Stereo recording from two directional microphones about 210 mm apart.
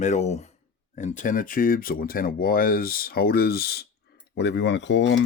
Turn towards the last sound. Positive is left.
turn(degrees=60)  # may be behind; listen again after turning